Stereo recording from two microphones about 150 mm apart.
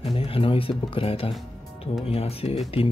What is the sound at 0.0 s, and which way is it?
Speech, 40° left (ahead or behind).